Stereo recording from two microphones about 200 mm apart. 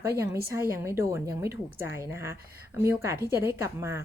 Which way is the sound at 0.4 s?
15° right (ahead or behind).